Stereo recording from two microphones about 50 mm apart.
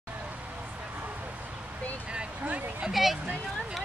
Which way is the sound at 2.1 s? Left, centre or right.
Right.